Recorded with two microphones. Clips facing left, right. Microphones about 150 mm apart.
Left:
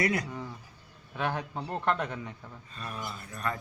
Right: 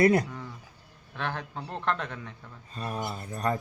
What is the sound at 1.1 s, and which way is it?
Speech, 10° left (ahead or behind).